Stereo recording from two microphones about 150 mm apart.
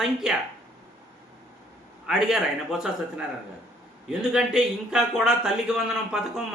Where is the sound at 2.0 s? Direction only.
5° right (ahead or behind).